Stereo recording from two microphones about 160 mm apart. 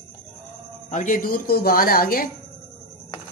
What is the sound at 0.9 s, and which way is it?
Speech, 55° left (ahead or behind).